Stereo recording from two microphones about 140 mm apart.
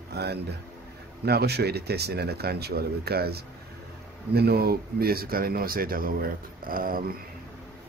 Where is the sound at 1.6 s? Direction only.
90° right.